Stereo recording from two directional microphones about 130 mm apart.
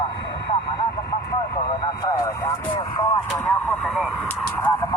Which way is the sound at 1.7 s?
30° left (ahead or behind).